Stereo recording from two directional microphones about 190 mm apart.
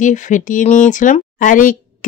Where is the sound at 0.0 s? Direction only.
40° left (ahead or behind).